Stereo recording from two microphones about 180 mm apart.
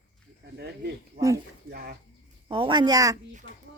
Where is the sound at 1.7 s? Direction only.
60° right (ahead or behind).